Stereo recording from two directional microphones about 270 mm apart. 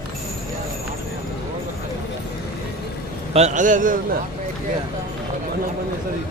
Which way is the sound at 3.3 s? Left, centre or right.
Right.